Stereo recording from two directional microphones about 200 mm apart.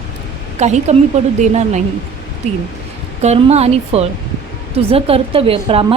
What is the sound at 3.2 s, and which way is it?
A woman's voice, 30° right (ahead or behind).